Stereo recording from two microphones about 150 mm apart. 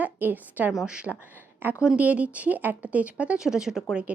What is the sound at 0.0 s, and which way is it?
A woman's voice, 10° right (ahead or behind).